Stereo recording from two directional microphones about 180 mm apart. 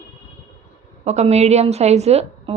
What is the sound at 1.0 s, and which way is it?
Speech, 40° right (ahead or behind).